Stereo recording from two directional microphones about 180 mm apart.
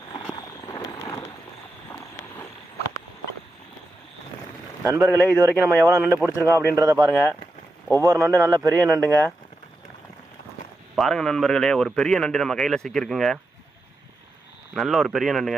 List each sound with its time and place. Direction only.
0.1 s a sound: 20° left (ahead or behind)
4.9 s speech: 5° right (ahead or behind)
10.9 s speech: centre (ahead or behind)
14.7 s speech: centre (ahead or behind)